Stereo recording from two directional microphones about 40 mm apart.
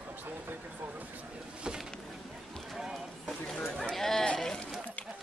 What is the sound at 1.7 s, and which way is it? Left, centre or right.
Vehicle, centre.